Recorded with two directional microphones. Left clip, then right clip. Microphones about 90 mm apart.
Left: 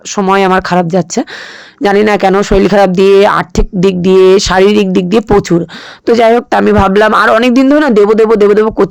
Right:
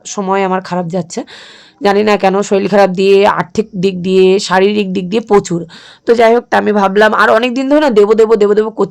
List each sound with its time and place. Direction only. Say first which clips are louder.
0.1 s speech: left 5 dB; 35° left (ahead or behind)
0.3 s a woman's voice: left 6 dB; 55° left (ahead or behind); by 5.6 s 40° left (ahead or behind)
6.1 s a woman's voice: left 1 dB; 55° left (ahead or behind); by 8.9 s 40° left (ahead or behind)